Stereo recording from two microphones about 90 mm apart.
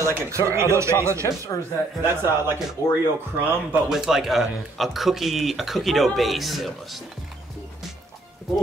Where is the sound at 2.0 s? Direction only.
25° right (ahead or behind).